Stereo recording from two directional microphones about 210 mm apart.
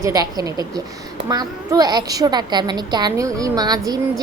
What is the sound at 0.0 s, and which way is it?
A child's voice, 20° right (ahead or behind).